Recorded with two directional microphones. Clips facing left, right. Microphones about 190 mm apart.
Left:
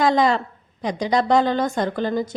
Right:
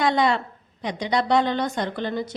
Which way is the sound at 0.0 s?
40° left (ahead or behind).